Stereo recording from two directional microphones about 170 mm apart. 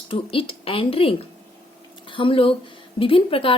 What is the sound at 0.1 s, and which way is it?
A woman's voice, 30° left (ahead or behind).